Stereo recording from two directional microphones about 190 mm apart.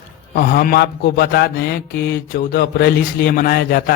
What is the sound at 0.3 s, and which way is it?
Mantra, 50° left (ahead or behind).